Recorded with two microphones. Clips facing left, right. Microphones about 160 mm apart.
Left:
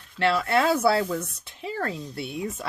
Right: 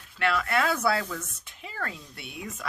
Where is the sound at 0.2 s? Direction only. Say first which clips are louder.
Left 4 dB; 30° left (ahead or behind).